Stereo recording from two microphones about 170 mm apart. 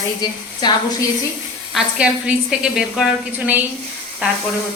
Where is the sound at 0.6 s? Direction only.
25° left (ahead or behind).